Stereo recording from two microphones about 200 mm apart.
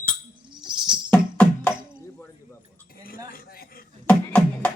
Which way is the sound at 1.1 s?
5° left (ahead or behind).